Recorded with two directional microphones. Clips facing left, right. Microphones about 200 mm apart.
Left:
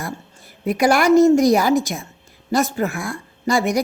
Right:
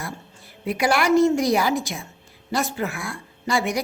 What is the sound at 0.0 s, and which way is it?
A woman's voice, 45° left (ahead or behind).